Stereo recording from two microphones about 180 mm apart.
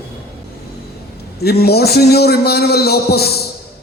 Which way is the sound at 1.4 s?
60° left (ahead or behind).